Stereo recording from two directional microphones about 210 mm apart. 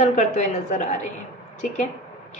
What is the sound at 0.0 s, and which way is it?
Speech, 35° left (ahead or behind).